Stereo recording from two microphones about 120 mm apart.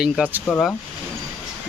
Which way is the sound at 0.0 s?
10° right (ahead or behind).